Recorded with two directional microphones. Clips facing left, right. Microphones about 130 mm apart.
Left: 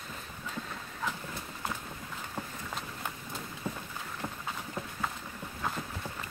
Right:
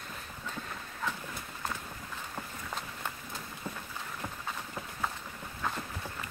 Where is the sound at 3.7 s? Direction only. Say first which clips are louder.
Left 3 dB; 10° left (ahead or behind).